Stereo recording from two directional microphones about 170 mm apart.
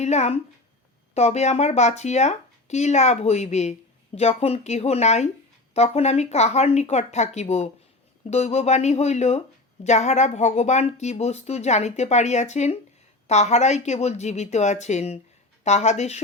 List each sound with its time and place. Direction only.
0.0 s speech: 40° left (ahead or behind)